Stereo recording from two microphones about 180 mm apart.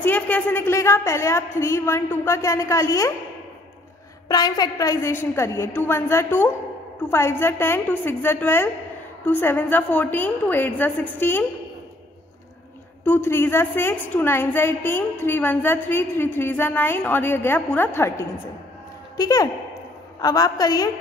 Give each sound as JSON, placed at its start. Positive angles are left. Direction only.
{"t": 0.0, "sound": "a woman's voice", "side_deg": 10}
{"t": 4.3, "sound": "a woman's voice", "side_deg": 20}
{"t": 13.0, "sound": "a woman's voice", "side_deg": 10}